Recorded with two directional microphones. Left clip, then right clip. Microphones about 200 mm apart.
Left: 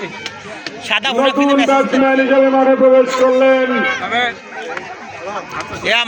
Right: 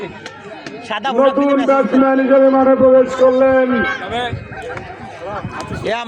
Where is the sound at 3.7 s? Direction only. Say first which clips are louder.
Left 1 dB; 65° right (ahead or behind).